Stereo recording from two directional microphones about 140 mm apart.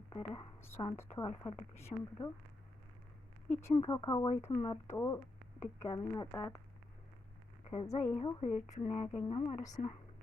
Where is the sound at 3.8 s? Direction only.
30° left (ahead or behind).